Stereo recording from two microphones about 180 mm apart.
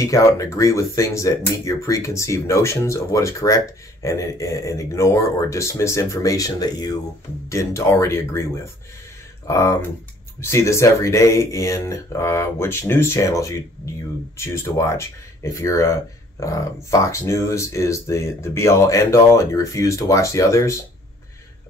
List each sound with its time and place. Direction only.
0.0 s speech: 15° left (ahead or behind)
9.5 s speech: 15° left (ahead or behind)